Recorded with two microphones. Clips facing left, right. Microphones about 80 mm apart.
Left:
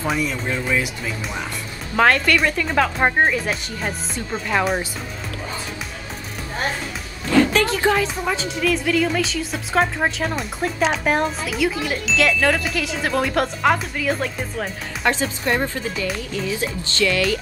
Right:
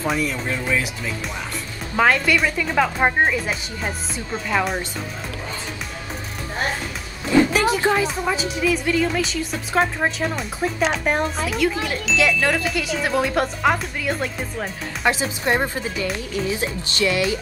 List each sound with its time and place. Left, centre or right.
0.0 s speech: centre
2.0 s speech: centre
7.3 s speech: centre
15.4 s speech: right